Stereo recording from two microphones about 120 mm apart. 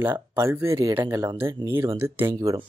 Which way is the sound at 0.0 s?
20° right (ahead or behind).